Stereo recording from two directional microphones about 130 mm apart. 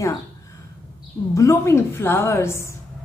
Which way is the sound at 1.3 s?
25° left (ahead or behind).